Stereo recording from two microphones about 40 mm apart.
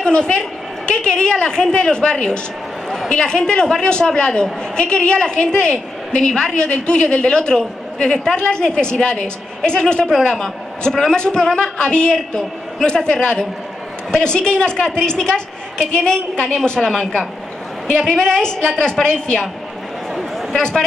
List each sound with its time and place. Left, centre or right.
0.0 s a woman's voice: left
20.5 s speech: centre